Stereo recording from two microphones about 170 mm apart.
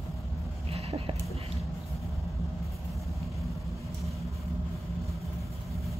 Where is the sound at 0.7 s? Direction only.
35° right (ahead or behind).